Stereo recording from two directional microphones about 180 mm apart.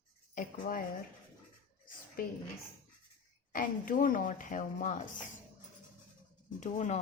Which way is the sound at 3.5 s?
50° left (ahead or behind).